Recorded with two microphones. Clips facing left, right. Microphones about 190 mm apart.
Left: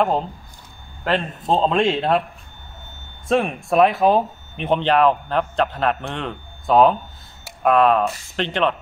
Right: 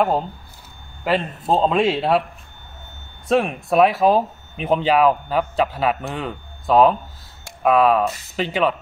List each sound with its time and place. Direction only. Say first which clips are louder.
1.0 s speech: right 1 dB; 5° right (ahead or behind)
3.3 s speech: right 1 dB; centre (ahead or behind)